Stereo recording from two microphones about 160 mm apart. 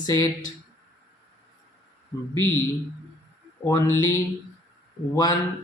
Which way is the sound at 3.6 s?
20° left (ahead or behind).